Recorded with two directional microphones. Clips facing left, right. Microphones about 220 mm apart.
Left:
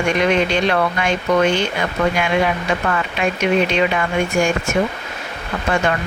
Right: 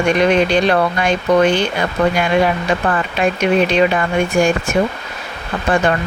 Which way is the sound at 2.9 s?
35° right (ahead or behind).